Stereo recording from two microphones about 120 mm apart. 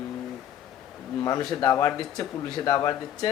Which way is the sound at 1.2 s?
35° left (ahead or behind).